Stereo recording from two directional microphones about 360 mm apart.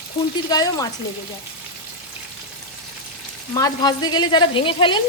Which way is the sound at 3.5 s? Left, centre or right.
Centre.